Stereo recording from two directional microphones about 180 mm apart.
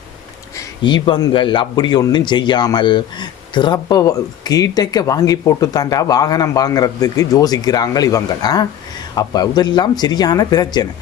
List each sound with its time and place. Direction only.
0.8 s speech: 25° left (ahead or behind)